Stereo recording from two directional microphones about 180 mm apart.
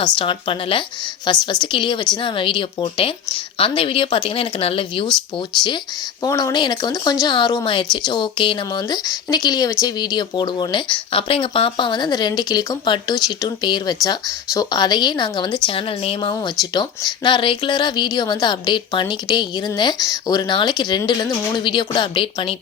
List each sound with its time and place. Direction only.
0.2 s speech: 30° left (ahead or behind)
6.2 s speech: 20° left (ahead or behind)